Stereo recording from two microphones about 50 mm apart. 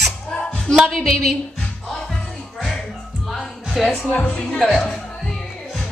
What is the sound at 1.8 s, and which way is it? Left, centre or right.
Music, centre.